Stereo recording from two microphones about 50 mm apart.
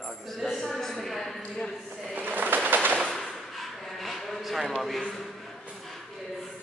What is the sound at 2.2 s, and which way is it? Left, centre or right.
Pigeon, right.